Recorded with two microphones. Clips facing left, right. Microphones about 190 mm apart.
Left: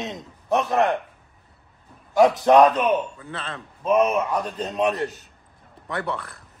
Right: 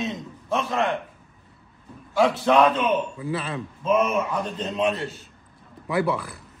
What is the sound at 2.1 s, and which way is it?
Speech, 20° left (ahead or behind).